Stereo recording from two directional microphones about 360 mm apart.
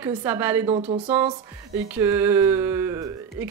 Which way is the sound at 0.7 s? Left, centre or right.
Centre.